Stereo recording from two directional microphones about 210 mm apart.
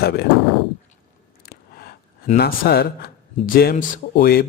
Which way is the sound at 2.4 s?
45° left (ahead or behind).